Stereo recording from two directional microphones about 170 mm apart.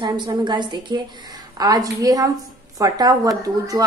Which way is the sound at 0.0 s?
25° right (ahead or behind).